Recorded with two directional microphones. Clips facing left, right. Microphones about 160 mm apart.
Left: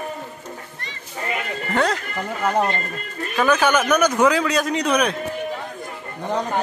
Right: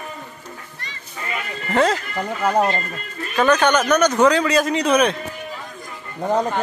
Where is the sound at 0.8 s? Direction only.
55° left (ahead or behind).